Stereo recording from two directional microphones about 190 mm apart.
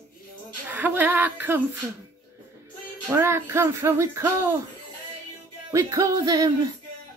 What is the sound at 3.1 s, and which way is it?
Speech, 15° right (ahead or behind).